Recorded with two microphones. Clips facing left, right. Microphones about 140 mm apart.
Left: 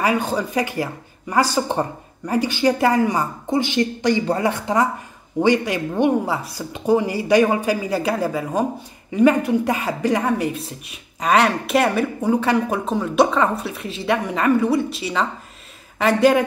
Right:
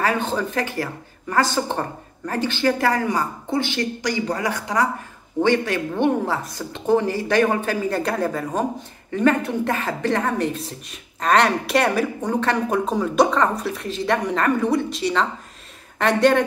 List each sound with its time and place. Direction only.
0.0 s speech: 10° left (ahead or behind)
5.4 s a woman's voice: 15° left (ahead or behind)